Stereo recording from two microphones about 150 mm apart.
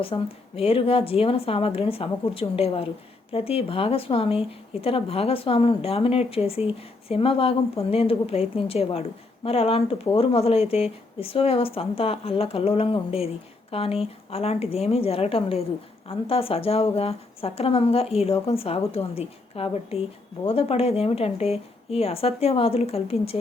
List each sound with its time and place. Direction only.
0.0 s speech: 40° left (ahead or behind)